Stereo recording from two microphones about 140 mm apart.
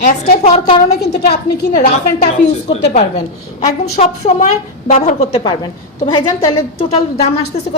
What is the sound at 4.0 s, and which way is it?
A woman's voice, 55° left (ahead or behind).